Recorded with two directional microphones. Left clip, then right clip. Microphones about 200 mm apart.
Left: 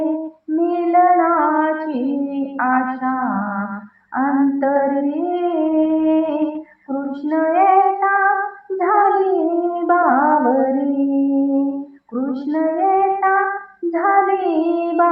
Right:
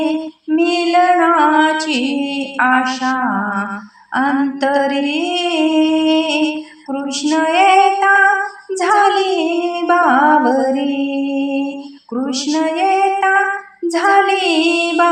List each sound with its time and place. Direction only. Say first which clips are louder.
0.5 s female singing: right 2 dB; 45° right (ahead or behind)
8.8 s music: right 2 dB; 45° right (ahead or behind)
12.1 s female singing: right 3 dB; 45° right (ahead or behind)